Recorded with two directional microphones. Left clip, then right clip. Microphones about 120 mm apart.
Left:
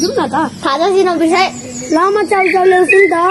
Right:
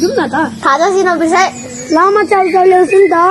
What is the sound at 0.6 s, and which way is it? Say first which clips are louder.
Speech: right 2 dB; 50° left (ahead or behind).